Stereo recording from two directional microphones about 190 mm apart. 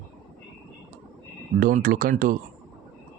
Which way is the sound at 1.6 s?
45° right (ahead or behind).